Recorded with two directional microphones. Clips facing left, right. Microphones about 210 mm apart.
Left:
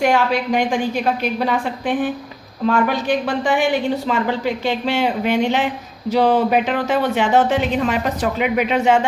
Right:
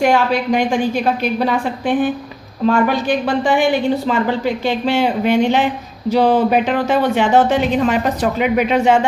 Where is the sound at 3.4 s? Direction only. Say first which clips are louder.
Right 4 dB; 30° right (ahead or behind).